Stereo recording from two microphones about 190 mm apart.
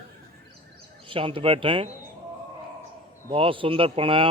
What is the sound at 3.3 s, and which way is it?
Speech, 30° right (ahead or behind).